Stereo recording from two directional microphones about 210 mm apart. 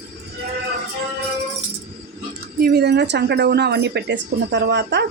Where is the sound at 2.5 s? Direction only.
50° right (ahead or behind).